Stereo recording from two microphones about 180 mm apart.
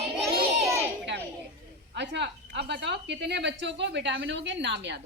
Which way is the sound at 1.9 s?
75° right (ahead or behind).